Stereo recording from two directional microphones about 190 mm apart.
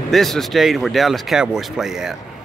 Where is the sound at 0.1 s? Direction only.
Centre (ahead or behind).